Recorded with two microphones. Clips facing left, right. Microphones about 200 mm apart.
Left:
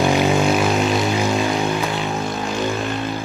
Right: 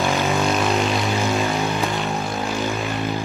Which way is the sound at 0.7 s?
Centre (ahead or behind).